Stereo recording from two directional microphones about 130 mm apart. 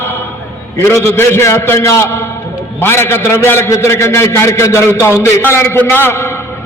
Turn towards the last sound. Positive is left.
turn(degrees=15)  # may be behind; listen again after turning